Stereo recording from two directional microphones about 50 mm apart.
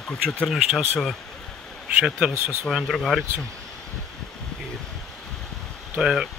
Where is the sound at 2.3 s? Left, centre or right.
Right.